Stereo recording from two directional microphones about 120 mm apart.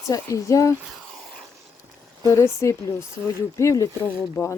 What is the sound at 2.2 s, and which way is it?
Speech, 25° left (ahead or behind).